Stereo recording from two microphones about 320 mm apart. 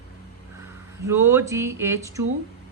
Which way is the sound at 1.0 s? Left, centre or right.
Centre.